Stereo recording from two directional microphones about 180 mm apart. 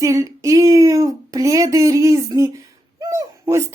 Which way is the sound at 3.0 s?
20° right (ahead or behind).